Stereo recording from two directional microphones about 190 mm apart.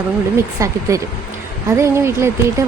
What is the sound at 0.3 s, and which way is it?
A woman's voice, 15° right (ahead or behind).